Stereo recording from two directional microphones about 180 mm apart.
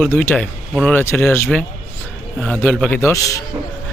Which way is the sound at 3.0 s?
15° left (ahead or behind).